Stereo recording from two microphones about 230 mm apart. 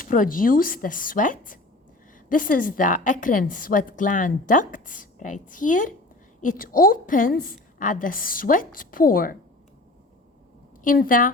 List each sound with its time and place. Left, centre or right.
0.0 s a woman's voice: left
10.8 s a woman's voice: left